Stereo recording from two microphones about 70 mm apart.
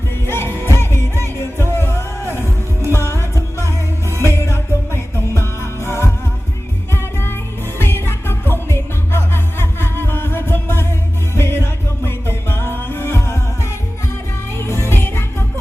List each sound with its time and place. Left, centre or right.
0.3 s music: left
14.6 s music: left